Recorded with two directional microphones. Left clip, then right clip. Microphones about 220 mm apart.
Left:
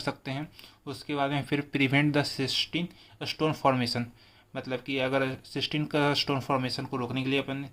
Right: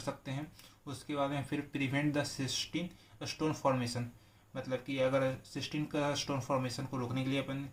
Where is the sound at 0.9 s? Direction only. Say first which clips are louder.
Left 6 dB; 30° left (ahead or behind).